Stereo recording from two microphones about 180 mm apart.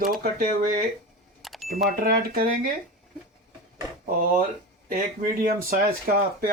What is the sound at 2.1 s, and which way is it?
Speech, 55° right (ahead or behind).